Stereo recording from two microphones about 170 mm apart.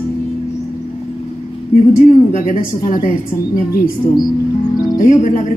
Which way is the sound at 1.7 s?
55° left (ahead or behind).